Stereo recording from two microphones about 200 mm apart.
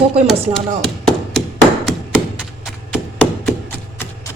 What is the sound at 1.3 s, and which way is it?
Tap, centre (ahead or behind).